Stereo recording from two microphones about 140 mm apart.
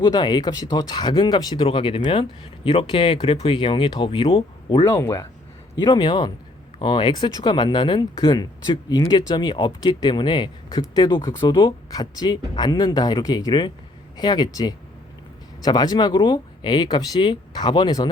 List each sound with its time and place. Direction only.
0.0 s speech: 30° left (ahead or behind)
4.9 s speech: 20° left (ahead or behind)
5.8 s speech: 30° left (ahead or behind)